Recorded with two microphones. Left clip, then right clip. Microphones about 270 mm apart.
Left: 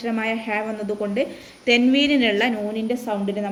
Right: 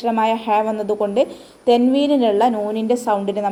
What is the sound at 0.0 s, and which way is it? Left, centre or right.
A woman's voice, centre.